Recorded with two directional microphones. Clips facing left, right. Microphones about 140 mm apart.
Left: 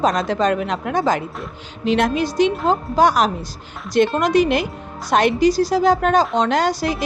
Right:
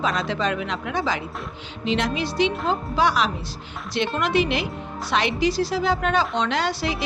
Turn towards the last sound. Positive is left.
turn(degrees=45)  # may be behind; listen again after turning